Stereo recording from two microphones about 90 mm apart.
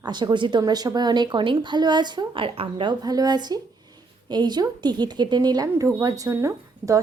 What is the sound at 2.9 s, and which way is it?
A woman's voice, 45° right (ahead or behind).